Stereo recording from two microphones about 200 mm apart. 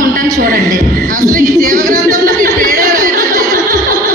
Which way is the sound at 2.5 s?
40° right (ahead or behind).